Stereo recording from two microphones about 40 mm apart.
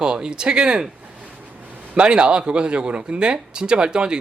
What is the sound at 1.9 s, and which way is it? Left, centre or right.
Speech, right.